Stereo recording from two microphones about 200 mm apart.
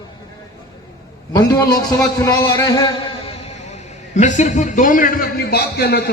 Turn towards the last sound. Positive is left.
turn(degrees=55)  # may be behind; listen again after turning